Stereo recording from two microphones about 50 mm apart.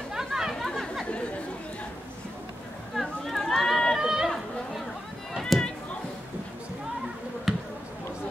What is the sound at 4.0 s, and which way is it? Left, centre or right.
Run, centre.